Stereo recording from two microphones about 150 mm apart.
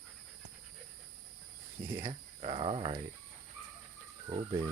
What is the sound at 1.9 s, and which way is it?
Speech, 35° right (ahead or behind).